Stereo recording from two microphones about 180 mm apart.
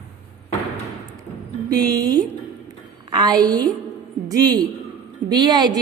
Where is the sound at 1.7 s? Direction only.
20° right (ahead or behind).